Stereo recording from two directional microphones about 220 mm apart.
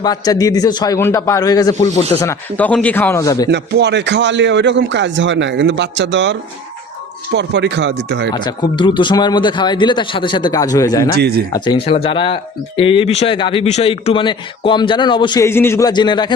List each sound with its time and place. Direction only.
0.0 s a man's voice: 15° left (ahead or behind)
3.5 s speech: 50° right (ahead or behind)
7.3 s speech: 50° right (ahead or behind)
8.3 s speech: 20° left (ahead or behind)
11.2 s speech: 45° right (ahead or behind)
11.5 s speech: 20° left (ahead or behind)